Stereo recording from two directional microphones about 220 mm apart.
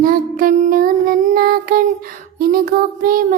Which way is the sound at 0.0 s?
40° right (ahead or behind).